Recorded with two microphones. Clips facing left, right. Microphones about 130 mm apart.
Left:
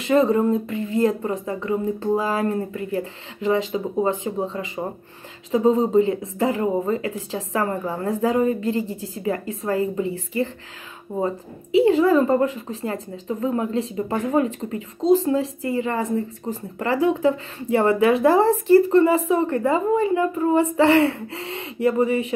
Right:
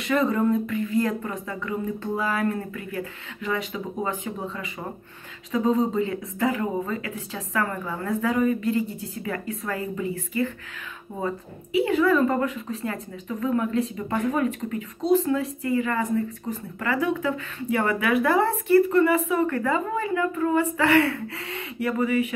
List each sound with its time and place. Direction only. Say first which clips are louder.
0.0 s a woman's voice: left 5 dB; 30° left (ahead or behind)